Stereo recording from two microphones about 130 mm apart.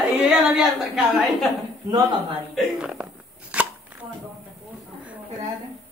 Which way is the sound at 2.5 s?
5° right (ahead or behind).